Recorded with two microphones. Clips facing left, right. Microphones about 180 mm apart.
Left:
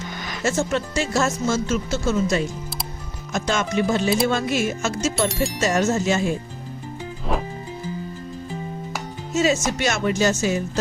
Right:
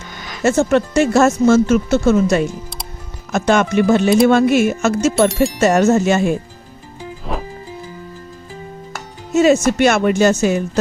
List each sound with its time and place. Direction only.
0.4 s speech: 65° right (ahead or behind)
5.3 s speech: centre (ahead or behind)
5.5 s speech: 65° right (ahead or behind)
7.3 s music: centre (ahead or behind)
9.3 s speech: 60° right (ahead or behind)